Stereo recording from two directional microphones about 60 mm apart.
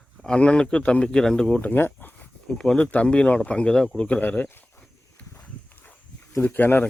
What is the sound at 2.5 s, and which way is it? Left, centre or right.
Speech, centre.